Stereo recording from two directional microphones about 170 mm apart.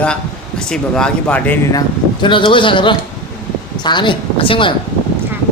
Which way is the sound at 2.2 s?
30° left (ahead or behind).